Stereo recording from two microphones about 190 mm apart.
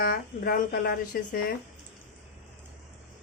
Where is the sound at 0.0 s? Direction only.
50° left (ahead or behind).